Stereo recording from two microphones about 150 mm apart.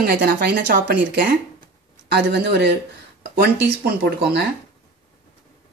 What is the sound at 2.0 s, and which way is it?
Speech, 90° right.